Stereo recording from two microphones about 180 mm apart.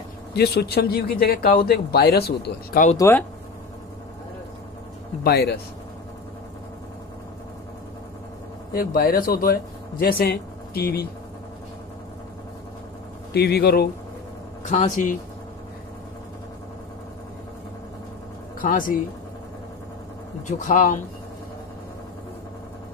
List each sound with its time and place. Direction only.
0.3 s a man's voice: 65° left (ahead or behind)
3.0 s speech: 15° left (ahead or behind)
5.2 s a man's voice: 65° left (ahead or behind)
8.7 s speech: 55° left (ahead or behind)
13.3 s a man's voice: 65° left (ahead or behind)
14.6 s speech: 40° left (ahead or behind)
18.6 s speech: 50° left (ahead or behind)
20.4 s speech: 40° left (ahead or behind)